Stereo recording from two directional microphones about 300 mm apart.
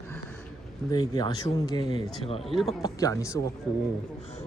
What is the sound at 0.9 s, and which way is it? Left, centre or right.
A man's voice, centre.